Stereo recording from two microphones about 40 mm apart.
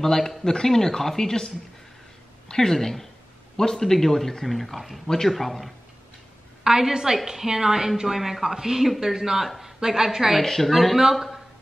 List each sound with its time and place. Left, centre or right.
0.0 s a woman's voice: centre
6.6 s a woman's voice: centre
10.4 s a woman's voice: centre